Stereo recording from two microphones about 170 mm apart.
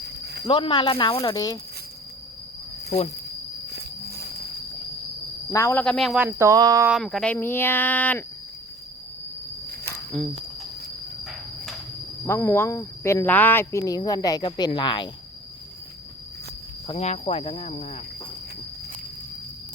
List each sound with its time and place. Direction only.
0.4 s speech: 30° left (ahead or behind)
3.7 s cricket: 70° right (ahead or behind)
5.5 s a sound: 15° left (ahead or behind)
5.8 s speech: 5° left (ahead or behind)
6.2 s speech: 20° right (ahead or behind)
6.8 s speech: centre (ahead or behind)
7.3 s a sound: 15° left (ahead or behind)
10.1 s a sound: 5° left (ahead or behind)
11.2 s cricket: centre (ahead or behind)
12.2 s speech: 15° left (ahead or behind)
16.8 s speech: 35° left (ahead or behind)